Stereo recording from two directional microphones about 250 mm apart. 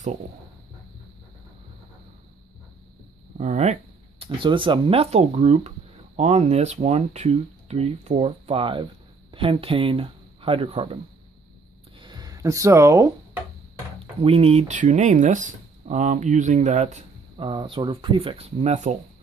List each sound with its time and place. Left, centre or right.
3.3 s speech: right
12.0 s a sound: centre
14.2 s speech: right